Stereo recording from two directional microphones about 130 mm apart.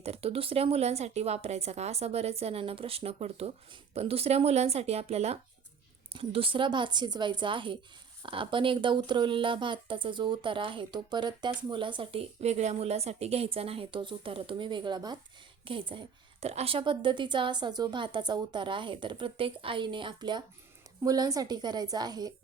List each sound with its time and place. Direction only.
0.0 s a woman's voice: 50° right (ahead or behind); by 22.3 s 30° right (ahead or behind)